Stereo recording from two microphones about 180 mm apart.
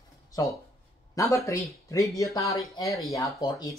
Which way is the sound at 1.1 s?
15° left (ahead or behind).